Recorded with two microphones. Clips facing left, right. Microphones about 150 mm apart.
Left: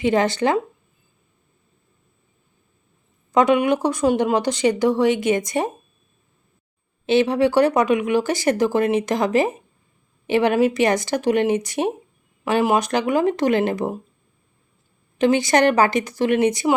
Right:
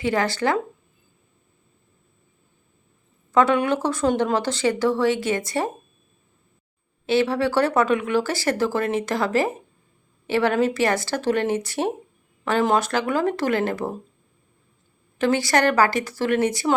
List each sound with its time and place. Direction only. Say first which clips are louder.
0.0 s a woman's voice: left 4 dB; 20° left (ahead or behind)
3.3 s speech: left 2 dB; 15° left (ahead or behind)
7.0 s speech: left 3 dB; 20° left (ahead or behind)
15.2 s a woman's voice: left 3 dB; 20° left (ahead or behind)